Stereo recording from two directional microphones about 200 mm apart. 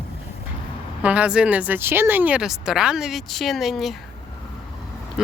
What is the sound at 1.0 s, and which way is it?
Speech, 5° right (ahead or behind).